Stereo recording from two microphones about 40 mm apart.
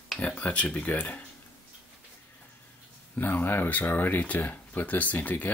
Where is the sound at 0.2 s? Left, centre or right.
Left.